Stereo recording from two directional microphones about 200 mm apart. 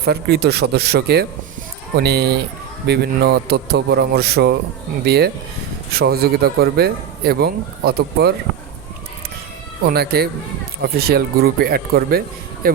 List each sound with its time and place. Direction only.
0.0 s speech: 55° right (ahead or behind)
9.8 s speech: 50° right (ahead or behind)